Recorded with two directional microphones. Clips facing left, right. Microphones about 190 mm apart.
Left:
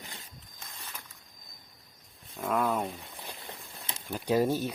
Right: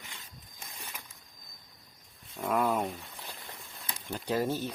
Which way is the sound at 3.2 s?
20° left (ahead or behind).